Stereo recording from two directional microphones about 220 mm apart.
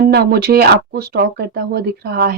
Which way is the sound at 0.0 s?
45° right (ahead or behind).